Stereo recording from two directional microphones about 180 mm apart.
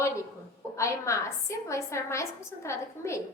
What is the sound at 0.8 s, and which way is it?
A woman's voice, 15° left (ahead or behind).